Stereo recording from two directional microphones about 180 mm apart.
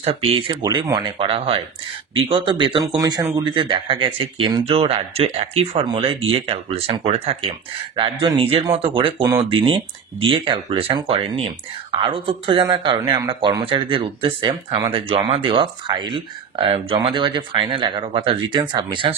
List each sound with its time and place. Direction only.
0.0 s speech: 30° right (ahead or behind)